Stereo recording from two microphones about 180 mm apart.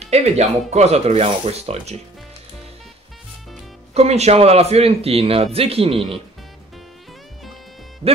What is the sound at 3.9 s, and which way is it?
Speech, 35° right (ahead or behind).